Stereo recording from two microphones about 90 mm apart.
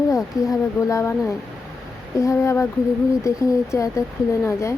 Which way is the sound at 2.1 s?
35° left (ahead or behind).